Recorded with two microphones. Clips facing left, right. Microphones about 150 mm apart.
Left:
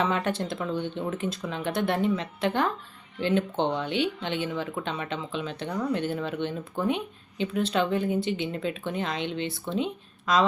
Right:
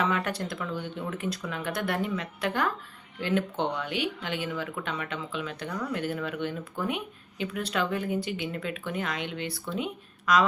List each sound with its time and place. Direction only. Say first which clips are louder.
0.0 s speech: left 2 dB; 25° left (ahead or behind)